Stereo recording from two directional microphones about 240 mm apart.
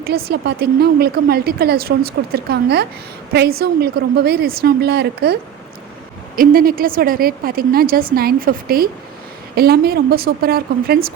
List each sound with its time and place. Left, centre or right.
0.0 s a woman's voice: right